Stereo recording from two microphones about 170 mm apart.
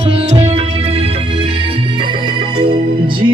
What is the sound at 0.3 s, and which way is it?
Music, 40° right (ahead or behind).